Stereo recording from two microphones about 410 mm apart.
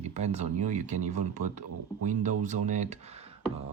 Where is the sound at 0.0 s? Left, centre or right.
Centre.